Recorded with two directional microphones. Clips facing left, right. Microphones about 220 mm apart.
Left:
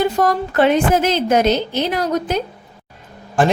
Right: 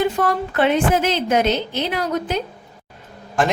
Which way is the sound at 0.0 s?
40° left (ahead or behind).